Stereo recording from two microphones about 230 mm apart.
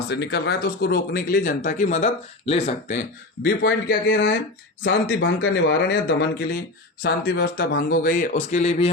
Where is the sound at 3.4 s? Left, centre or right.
Left.